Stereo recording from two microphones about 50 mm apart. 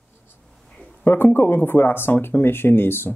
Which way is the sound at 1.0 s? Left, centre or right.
Left.